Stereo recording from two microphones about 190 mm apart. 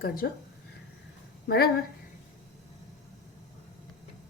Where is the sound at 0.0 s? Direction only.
50° left (ahead or behind).